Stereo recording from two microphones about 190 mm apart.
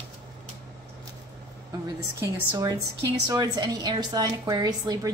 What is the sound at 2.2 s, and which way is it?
A woman's voice, 15° right (ahead or behind).